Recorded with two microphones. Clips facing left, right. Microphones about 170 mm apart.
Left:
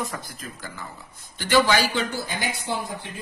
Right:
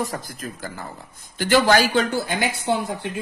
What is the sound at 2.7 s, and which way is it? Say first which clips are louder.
Speech: right 7 dB; 60° right (ahead or behind).